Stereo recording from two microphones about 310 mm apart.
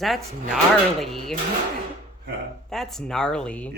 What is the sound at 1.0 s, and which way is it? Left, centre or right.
Speech, centre.